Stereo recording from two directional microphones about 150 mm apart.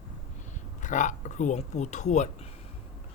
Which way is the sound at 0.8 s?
55° left (ahead or behind).